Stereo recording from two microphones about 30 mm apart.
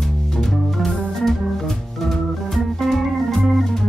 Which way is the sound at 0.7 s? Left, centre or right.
Centre.